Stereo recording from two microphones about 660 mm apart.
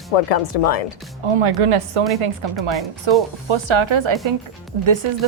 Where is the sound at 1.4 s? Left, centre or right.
Right.